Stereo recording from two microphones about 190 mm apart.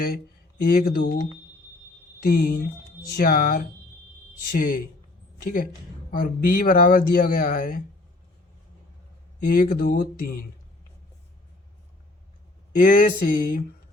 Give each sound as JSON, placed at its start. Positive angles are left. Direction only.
{"t": 0.6, "sound": "speech", "side_deg": 50}
{"t": 2.2, "sound": "speech", "side_deg": 50}
{"t": 9.4, "sound": "speech", "side_deg": 45}
{"t": 12.7, "sound": "speech", "side_deg": 45}